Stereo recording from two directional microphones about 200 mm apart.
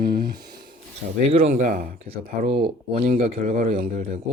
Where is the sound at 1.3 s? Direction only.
30° right (ahead or behind).